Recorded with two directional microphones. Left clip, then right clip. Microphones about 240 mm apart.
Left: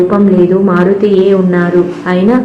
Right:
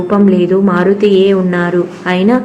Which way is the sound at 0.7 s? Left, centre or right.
Right.